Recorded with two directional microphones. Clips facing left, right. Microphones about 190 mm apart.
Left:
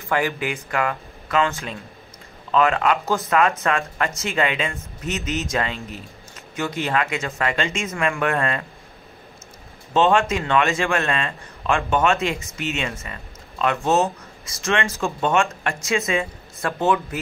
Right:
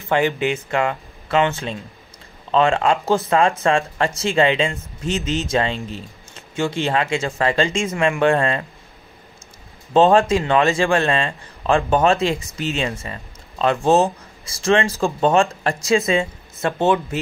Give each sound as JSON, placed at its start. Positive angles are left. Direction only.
{"t": 0.1, "sound": "speech", "side_deg": -25}
{"t": 9.9, "sound": "a man's voice", "side_deg": -35}